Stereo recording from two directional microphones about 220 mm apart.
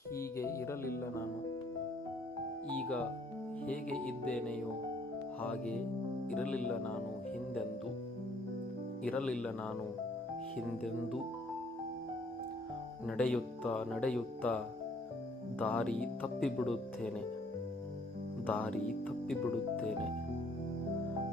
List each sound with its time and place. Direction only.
0.2 s music: 15° left (ahead or behind)
2.6 s music: 5° left (ahead or behind)
4.0 s speech: 5° left (ahead or behind)
9.0 s speech: 5° left (ahead or behind)
13.1 s speech: 5° left (ahead or behind)
18.4 s speech: 5° left (ahead or behind)